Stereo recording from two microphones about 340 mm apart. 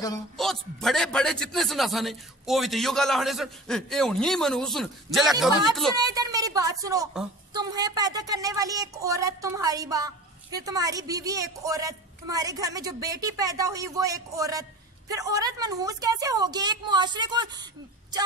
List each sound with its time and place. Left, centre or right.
0.0 s a man's voice: centre
5.9 s a woman's voice: centre